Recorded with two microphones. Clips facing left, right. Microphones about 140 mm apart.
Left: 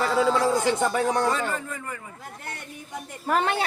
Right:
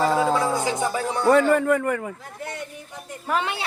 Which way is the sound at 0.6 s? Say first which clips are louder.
Left 1 dB; 65° left (ahead or behind).